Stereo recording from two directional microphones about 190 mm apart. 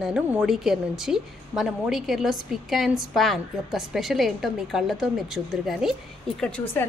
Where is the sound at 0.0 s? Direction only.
5° right (ahead or behind).